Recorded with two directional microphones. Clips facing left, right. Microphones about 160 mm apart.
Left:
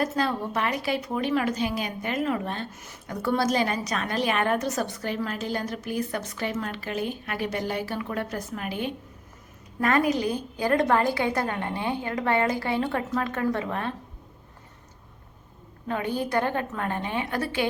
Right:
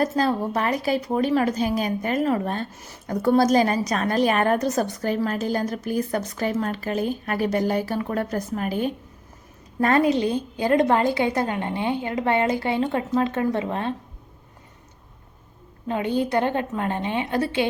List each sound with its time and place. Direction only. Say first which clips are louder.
0.0 s a woman's voice: right 4 dB; 40° right (ahead or behind)
9.8 s a woman's voice: right 4 dB; 30° right (ahead or behind)
15.9 s a woman's voice: right 4 dB; 20° right (ahead or behind)